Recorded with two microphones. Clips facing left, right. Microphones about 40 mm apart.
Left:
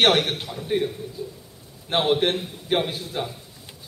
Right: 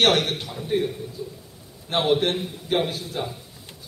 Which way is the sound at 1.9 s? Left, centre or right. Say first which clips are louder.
Even; centre.